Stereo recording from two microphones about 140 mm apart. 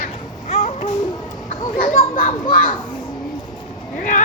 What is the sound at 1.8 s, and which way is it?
Speech, 75° left (ahead or behind).